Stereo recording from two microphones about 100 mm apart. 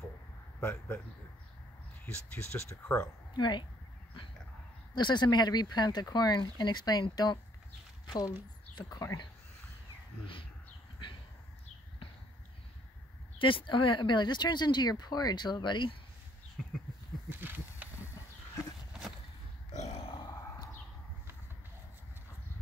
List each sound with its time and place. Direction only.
0.6 s speech: 20° left (ahead or behind)
2.3 s speech: 25° left (ahead or behind)
3.3 s speech: 50° left (ahead or behind)
4.9 s speech: 50° left (ahead or behind)
8.7 s speech: 35° left (ahead or behind)
13.4 s speech: 60° left (ahead or behind)
17.3 s a sound: 20° right (ahead or behind)
19.9 s grunt: 65° left (ahead or behind)